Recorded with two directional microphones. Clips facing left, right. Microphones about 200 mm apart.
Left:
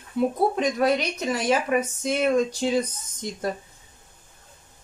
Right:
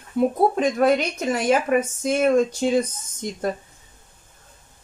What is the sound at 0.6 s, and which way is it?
Speech, 50° right (ahead or behind).